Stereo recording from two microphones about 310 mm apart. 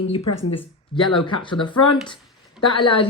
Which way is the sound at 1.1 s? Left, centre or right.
Centre.